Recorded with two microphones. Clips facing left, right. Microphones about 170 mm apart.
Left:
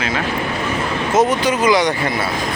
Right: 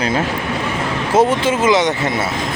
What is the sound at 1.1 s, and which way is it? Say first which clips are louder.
Speech: right 2 dB; 25° right (ahead or behind).